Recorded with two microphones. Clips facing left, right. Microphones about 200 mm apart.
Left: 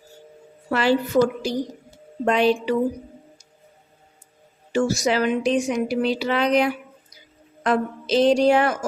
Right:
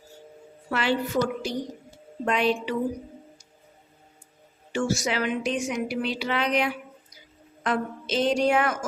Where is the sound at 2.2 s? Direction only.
35° left (ahead or behind).